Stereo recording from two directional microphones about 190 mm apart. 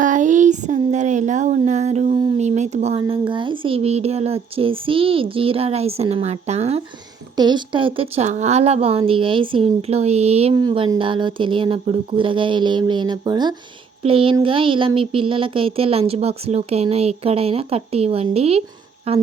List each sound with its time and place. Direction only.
0.0 s a sound: 40° right (ahead or behind)
2.4 s speech: 35° right (ahead or behind)
7.3 s speech: 25° right (ahead or behind)